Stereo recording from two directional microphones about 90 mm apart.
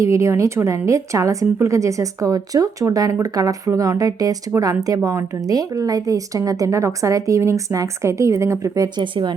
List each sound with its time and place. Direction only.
0.0 s a woman's voice: 35° right (ahead or behind)
9.0 s speech: 60° right (ahead or behind)